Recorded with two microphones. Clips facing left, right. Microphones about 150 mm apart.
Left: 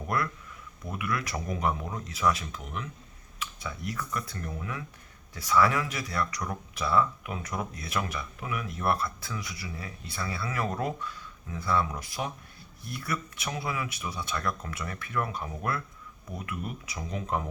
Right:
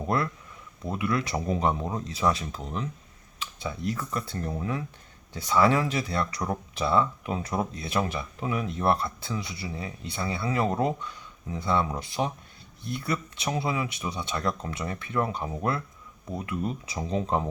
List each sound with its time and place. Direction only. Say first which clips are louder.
0.1 s speech: right 2 dB; 25° right (ahead or behind)